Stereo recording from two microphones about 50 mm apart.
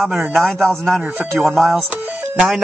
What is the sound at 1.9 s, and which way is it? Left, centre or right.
Music, right.